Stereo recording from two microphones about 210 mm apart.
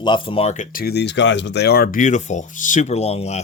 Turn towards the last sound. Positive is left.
turn(degrees=30)  # may be behind; listen again after turning